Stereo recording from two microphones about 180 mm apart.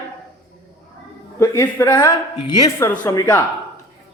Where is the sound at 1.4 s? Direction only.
15° left (ahead or behind).